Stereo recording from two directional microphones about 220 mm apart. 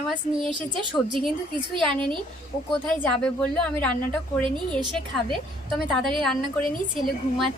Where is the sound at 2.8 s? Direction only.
5° left (ahead or behind).